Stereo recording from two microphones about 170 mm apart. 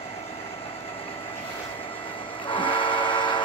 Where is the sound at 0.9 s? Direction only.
35° left (ahead or behind).